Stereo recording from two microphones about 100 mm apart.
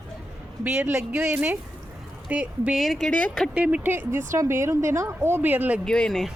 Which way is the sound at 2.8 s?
Centre (ahead or behind).